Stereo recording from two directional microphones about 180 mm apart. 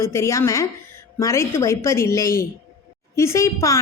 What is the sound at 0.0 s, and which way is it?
A woman's voice, 15° left (ahead or behind).